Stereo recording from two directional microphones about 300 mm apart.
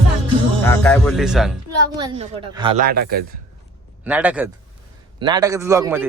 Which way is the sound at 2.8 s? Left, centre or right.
Right.